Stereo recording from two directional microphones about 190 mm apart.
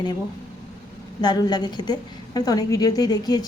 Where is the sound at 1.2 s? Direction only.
20° left (ahead or behind).